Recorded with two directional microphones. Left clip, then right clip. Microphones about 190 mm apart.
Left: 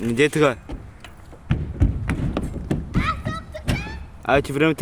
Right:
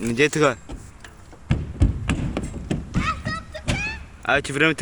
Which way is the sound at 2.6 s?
20° right (ahead or behind).